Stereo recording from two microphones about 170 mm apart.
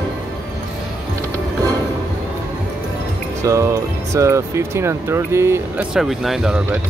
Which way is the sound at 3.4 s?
20° right (ahead or behind).